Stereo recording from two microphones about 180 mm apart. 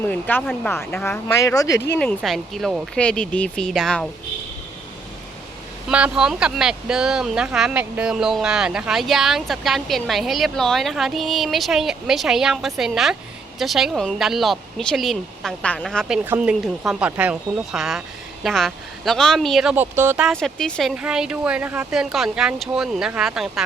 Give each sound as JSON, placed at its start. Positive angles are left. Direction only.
{"t": 0.0, "sound": "speech", "side_deg": 10}
{"t": 2.2, "sound": "speech", "side_deg": 0}
{"t": 5.9, "sound": "speech", "side_deg": -5}
{"t": 20.2, "sound": "speech", "side_deg": 5}